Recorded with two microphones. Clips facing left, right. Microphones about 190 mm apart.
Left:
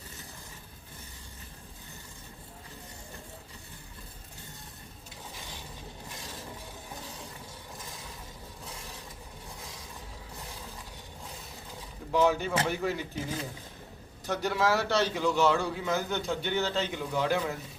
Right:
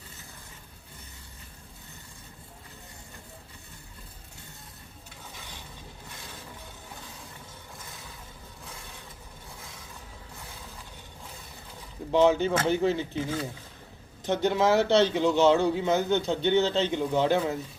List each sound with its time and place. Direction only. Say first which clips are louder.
12.1 s a man's voice: right 4 dB; 25° right (ahead or behind)
14.3 s a man's voice: right 4 dB; 20° right (ahead or behind)